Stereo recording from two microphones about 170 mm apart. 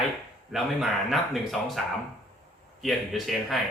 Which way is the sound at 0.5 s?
Centre (ahead or behind).